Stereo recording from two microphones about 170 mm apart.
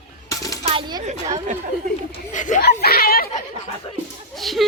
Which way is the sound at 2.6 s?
65° left (ahead or behind).